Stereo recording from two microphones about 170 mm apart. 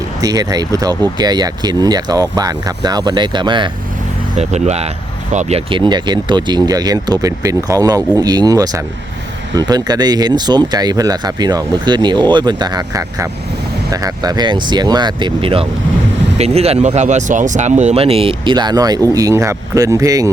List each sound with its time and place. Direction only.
0.2 s speech: 20° right (ahead or behind)
4.4 s speech: 40° right (ahead or behind); by 20.3 s 20° right (ahead or behind)